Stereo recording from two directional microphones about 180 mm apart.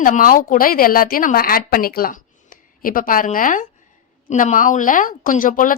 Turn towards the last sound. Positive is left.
turn(degrees=50)  # may be behind; listen again after turning